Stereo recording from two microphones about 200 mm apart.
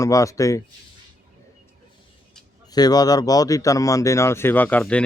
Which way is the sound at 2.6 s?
20° left (ahead or behind).